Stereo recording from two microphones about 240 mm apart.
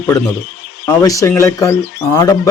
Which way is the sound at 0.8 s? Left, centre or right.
Centre.